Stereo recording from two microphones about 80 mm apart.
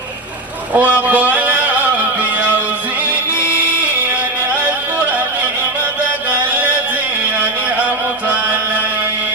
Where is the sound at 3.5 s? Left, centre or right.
Centre.